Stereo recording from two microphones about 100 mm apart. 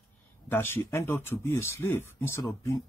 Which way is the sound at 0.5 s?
20° left (ahead or behind).